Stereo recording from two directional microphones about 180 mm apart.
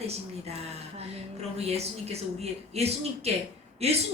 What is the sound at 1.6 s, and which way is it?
Speech, 35° right (ahead or behind).